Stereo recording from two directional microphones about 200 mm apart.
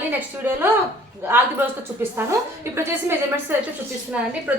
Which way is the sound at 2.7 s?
10° right (ahead or behind).